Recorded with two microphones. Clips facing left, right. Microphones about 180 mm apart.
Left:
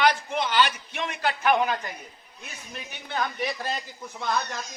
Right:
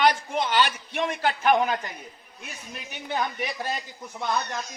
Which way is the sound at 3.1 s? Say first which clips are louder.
Even; 15° right (ahead or behind).